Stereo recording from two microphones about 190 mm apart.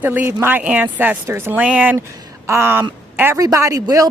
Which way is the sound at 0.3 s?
10° right (ahead or behind).